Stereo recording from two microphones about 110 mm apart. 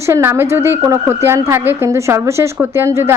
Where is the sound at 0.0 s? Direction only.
25° right (ahead or behind).